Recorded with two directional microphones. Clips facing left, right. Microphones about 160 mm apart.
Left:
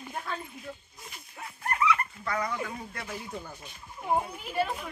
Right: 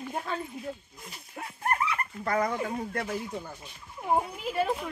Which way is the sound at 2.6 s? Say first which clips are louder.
Right 7 dB; 50° right (ahead or behind).